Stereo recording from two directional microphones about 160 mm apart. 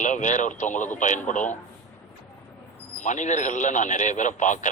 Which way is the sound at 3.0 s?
50° left (ahead or behind).